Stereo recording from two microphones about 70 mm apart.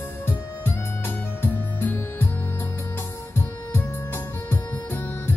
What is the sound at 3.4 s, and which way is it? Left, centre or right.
Music, left.